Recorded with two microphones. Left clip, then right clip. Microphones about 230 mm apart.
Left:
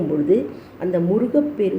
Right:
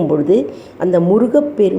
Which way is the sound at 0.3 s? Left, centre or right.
Right.